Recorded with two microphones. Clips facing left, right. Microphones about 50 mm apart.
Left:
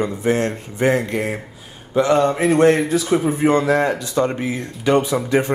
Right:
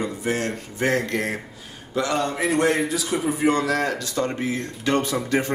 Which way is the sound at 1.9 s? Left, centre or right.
Left.